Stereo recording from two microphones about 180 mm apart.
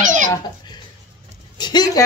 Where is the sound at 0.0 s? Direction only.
45° right (ahead or behind).